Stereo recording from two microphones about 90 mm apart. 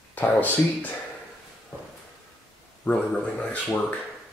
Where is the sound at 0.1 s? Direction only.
20° left (ahead or behind).